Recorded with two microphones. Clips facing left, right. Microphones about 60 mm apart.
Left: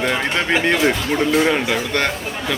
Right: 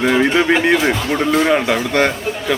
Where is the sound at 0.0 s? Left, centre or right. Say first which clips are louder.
Right 6 dB; centre.